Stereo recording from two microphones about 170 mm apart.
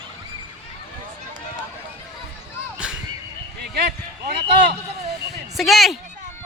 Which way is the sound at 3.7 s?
70° right (ahead or behind).